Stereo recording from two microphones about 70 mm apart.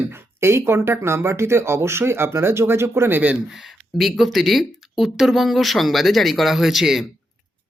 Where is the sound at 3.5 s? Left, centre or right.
Centre.